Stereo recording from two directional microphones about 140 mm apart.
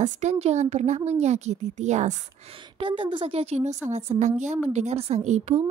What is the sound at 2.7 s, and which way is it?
A woman's voice, 35° right (ahead or behind).